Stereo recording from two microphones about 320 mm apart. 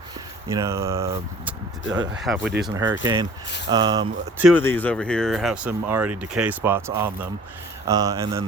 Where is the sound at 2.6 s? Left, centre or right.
Centre.